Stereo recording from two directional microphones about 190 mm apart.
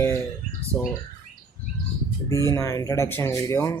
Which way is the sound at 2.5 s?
15° left (ahead or behind).